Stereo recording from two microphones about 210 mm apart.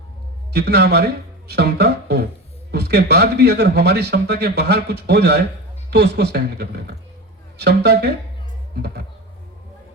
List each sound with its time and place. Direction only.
0.5 s speech: 50° right (ahead or behind)